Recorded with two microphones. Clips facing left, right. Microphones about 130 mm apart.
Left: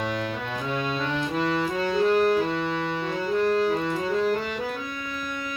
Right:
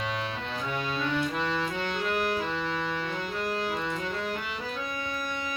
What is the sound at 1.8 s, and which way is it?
Music, 35° left (ahead or behind).